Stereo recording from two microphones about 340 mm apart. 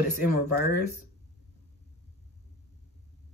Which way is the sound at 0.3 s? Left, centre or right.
Right.